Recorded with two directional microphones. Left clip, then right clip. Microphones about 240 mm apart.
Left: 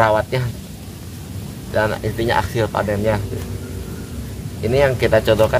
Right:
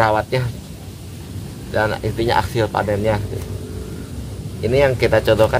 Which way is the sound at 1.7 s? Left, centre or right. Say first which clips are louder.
Even; centre.